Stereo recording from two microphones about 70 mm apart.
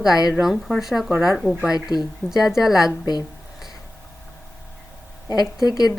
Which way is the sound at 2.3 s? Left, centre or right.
Centre.